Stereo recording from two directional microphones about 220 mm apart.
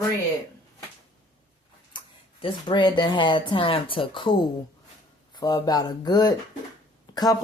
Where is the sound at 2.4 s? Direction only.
20° left (ahead or behind).